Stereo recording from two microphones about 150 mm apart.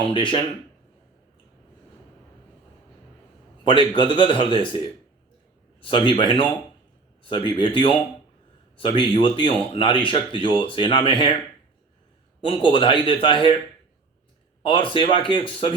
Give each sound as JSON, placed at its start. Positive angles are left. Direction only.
{"t": 0.1, "sound": "speech", "side_deg": 35}
{"t": 3.6, "sound": "speech", "side_deg": 35}
{"t": 5.8, "sound": "speech", "side_deg": 35}
{"t": 12.5, "sound": "speech", "side_deg": 35}
{"t": 14.6, "sound": "speech", "side_deg": 35}